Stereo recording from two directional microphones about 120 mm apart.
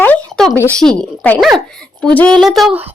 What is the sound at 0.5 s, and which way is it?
Speech, 15° left (ahead or behind).